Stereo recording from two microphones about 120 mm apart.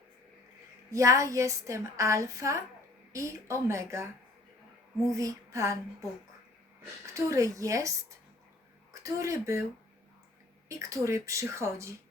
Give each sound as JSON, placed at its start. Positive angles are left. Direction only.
{"t": 0.9, "sound": "a woman's voice", "side_deg": -25}
{"t": 7.1, "sound": "a woman's voice", "side_deg": -25}
{"t": 10.7, "sound": "a woman's voice", "side_deg": -25}